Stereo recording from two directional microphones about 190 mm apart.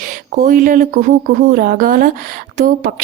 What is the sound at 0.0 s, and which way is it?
A woman's voice, 45° right (ahead or behind).